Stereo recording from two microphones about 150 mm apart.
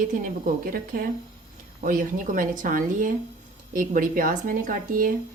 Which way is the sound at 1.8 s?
65° right (ahead or behind).